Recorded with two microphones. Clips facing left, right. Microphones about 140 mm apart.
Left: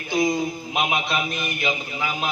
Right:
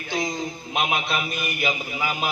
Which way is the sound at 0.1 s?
10° left (ahead or behind).